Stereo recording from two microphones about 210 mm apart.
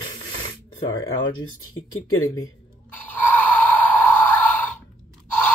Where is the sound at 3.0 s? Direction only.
10° left (ahead or behind).